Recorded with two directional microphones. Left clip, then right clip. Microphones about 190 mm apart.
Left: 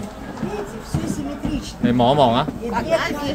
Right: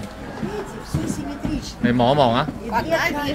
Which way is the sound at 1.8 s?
5° left (ahead or behind).